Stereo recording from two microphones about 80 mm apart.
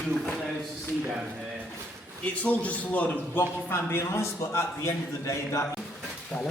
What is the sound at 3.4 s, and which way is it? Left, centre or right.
A man's voice, left.